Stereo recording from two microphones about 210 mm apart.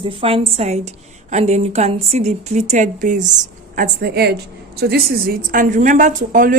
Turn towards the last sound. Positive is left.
turn(degrees=-40)  # may be behind; listen again after turning